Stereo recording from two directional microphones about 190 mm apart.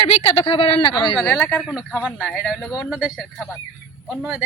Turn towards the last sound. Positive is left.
turn(degrees=-5)  # may be behind; listen again after turning